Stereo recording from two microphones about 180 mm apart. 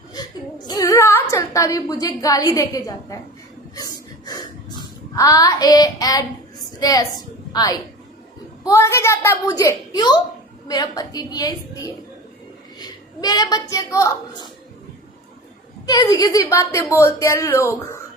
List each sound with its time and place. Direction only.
0.7 s a woman's voice: 20° left (ahead or behind)
4.3 s child singing: 25° left (ahead or behind)
6.7 s a woman's voice: 20° left (ahead or behind)
15.9 s a woman's voice: 20° left (ahead or behind)